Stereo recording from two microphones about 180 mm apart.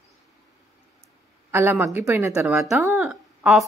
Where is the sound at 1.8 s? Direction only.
15° right (ahead or behind).